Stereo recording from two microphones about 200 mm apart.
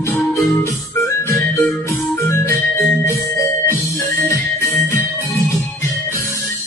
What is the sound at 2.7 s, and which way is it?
Music, 15° left (ahead or behind).